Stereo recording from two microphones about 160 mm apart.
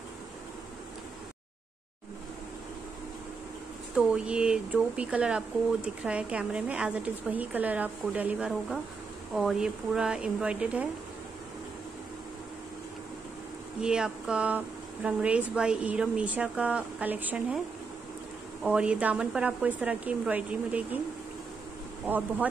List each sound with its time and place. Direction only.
3.9 s a woman's voice: 5° right (ahead or behind)
13.7 s a woman's voice: 5° right (ahead or behind)
18.6 s a woman's voice: 5° right (ahead or behind)
22.0 s a woman's voice: 10° right (ahead or behind)